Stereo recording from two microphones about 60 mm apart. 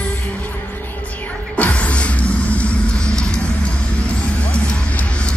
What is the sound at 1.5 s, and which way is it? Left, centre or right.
Music, left.